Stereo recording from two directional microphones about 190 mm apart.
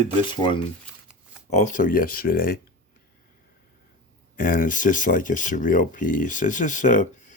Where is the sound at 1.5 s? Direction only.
40° left (ahead or behind).